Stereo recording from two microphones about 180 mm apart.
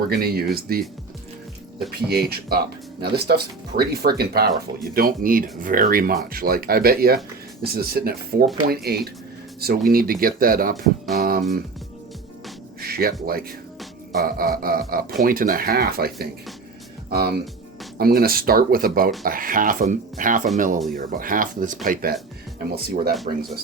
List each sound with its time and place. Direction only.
0.1 s speech: 60° right (ahead or behind)
1.9 s speech: 60° right (ahead or behind)
11.1 s music: 55° right (ahead or behind)
12.8 s a sound: 55° right (ahead or behind)
14.2 s speech: 55° right (ahead or behind)
23.3 s speech: 40° right (ahead or behind)